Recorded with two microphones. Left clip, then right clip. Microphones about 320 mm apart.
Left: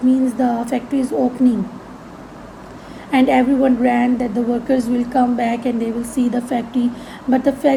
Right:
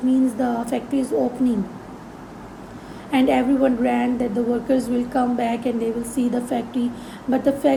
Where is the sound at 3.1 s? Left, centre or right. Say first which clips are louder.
Left 4 dB; centre.